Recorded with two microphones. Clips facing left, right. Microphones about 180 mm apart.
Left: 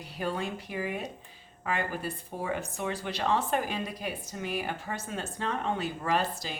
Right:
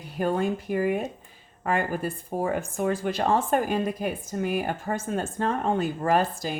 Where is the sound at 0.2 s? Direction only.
50° right (ahead or behind).